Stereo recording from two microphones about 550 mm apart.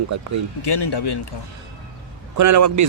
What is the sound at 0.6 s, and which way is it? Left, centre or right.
Speech, left.